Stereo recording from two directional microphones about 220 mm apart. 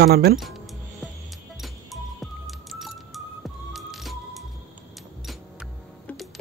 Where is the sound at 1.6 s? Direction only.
Centre (ahead or behind).